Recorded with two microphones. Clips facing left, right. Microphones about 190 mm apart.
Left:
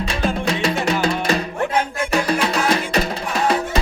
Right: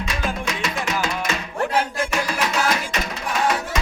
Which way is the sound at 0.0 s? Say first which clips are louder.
Left 5 dB; 35° left (ahead or behind).